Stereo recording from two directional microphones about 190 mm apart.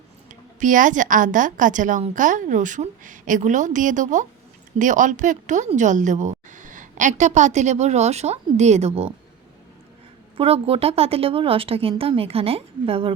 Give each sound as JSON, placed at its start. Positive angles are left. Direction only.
{"t": 0.3, "sound": "a woman's voice", "side_deg": -45}
{"t": 10.3, "sound": "a woman's voice", "side_deg": -30}